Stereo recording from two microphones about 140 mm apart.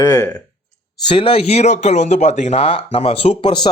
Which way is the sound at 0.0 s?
25° left (ahead or behind).